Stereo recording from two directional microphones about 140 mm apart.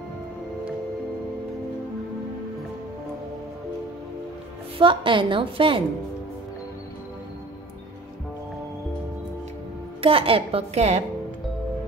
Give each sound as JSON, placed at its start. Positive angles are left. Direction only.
{"t": 4.7, "sound": "a woman's voice", "side_deg": -35}
{"t": 10.0, "sound": "a woman's voice", "side_deg": -40}